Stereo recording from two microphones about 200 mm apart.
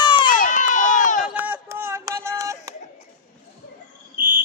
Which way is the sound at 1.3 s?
10° right (ahead or behind).